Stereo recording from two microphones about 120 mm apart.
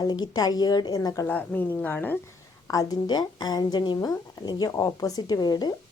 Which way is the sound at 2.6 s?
30° left (ahead or behind).